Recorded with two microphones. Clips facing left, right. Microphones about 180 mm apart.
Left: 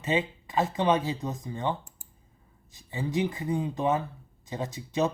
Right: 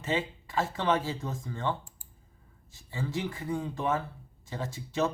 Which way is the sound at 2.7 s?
15° left (ahead or behind).